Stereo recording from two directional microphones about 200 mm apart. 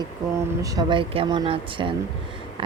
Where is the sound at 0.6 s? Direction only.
20° right (ahead or behind).